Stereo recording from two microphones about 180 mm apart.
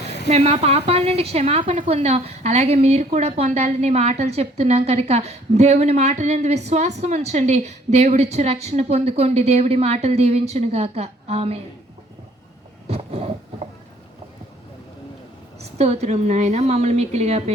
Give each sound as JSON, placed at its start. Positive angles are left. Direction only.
{"t": 0.3, "sound": "a woman's voice", "side_deg": -35}
{"t": 12.9, "sound": "a sound", "side_deg": -35}
{"t": 15.6, "sound": "a woman's voice", "side_deg": -35}